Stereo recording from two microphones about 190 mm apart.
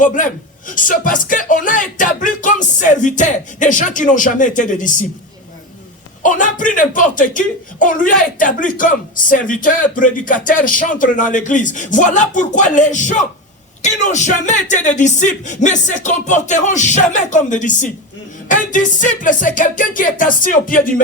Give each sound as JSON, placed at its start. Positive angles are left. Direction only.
{"t": 0.0, "sound": "speech", "side_deg": 45}
{"t": 6.2, "sound": "speech", "side_deg": 40}